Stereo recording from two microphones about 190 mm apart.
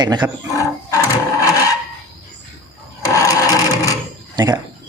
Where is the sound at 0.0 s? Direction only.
20° right (ahead or behind).